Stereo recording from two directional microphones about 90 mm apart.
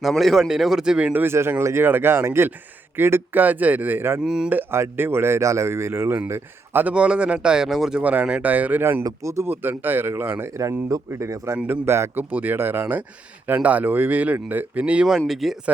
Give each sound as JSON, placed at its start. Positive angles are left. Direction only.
{"t": 0.0, "sound": "a man's voice", "side_deg": 0}
{"t": 1.2, "sound": "speech", "side_deg": -25}
{"t": 4.2, "sound": "speech", "side_deg": -5}
{"t": 4.4, "sound": "speech", "side_deg": -20}
{"t": 6.8, "sound": "speech", "side_deg": -10}
{"t": 9.5, "sound": "speech", "side_deg": -20}
{"t": 11.5, "sound": "a man's voice", "side_deg": -20}